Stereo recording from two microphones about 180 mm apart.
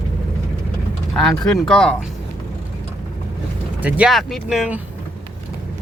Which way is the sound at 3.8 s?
5° right (ahead or behind).